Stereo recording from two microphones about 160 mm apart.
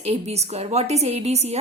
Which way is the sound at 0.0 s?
40° right (ahead or behind).